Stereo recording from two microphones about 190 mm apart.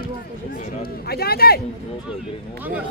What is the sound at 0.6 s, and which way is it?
A man's voice, 55° left (ahead or behind).